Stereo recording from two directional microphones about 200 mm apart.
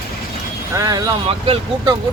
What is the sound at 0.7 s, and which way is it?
Speech, 20° right (ahead or behind).